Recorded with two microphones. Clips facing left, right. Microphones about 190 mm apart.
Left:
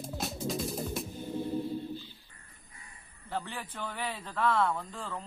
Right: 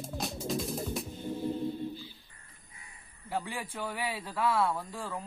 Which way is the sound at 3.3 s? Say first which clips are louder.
Right 2 dB; 10° right (ahead or behind).